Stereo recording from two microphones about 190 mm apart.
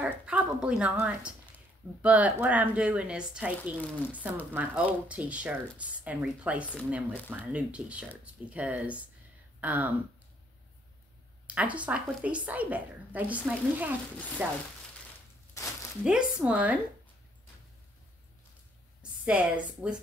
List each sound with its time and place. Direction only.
0.0 s a woman's voice: 5° right (ahead or behind)
11.4 s a woman's voice: 5° right (ahead or behind)
15.6 s a sound: 15° left (ahead or behind)
16.0 s speech: 5° right (ahead or behind)
19.2 s a woman's voice: 5° right (ahead or behind)